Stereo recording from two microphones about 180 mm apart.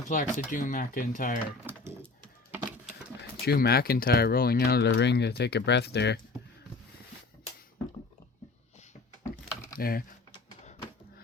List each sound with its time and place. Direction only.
0.1 s speech: 45° left (ahead or behind)
1.7 s a sound: 10° right (ahead or behind)
3.2 s speech: 60° left (ahead or behind)
9.7 s speech: 55° left (ahead or behind)